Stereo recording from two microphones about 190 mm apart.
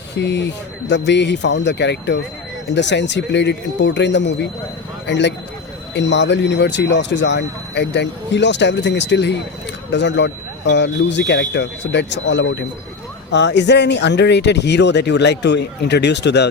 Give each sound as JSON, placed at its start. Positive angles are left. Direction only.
{"t": 0.2, "sound": "speech", "side_deg": 65}